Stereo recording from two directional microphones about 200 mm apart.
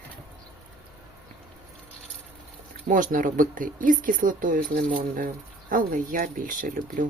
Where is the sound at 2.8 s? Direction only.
40° right (ahead or behind).